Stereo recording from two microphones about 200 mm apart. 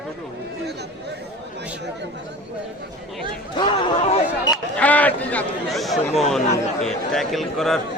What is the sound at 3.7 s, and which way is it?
Speech, 25° left (ahead or behind).